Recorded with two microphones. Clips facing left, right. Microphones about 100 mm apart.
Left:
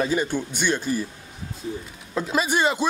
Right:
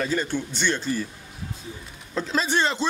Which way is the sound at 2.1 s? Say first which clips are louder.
Left 1 dB; 10° left (ahead or behind).